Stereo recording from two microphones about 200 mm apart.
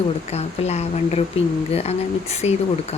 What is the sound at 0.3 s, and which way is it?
Speech, 30° left (ahead or behind).